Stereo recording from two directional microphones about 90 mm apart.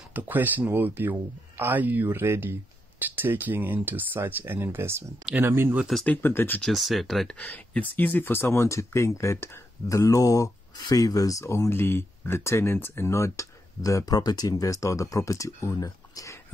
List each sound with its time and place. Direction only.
0.1 s speech: 20° right (ahead or behind)
6.0 s speech: 25° left (ahead or behind)
6.6 s speech: centre (ahead or behind)
7.3 s speech: 20° left (ahead or behind); by 16.3 s 35° left (ahead or behind)